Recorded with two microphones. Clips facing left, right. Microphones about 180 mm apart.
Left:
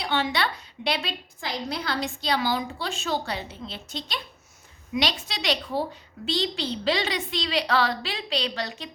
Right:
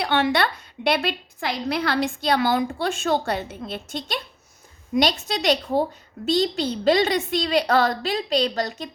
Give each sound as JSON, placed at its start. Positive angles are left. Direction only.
{"t": 0.0, "sound": "a woman's voice", "side_deg": -60}